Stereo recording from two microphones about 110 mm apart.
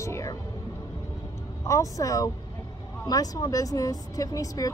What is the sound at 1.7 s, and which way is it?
Speech, 30° left (ahead or behind).